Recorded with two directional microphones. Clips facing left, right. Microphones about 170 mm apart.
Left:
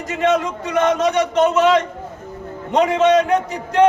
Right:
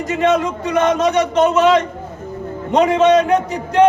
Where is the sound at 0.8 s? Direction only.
20° right (ahead or behind).